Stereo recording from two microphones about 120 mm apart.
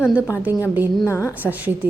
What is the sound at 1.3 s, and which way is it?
Speech, 15° right (ahead or behind).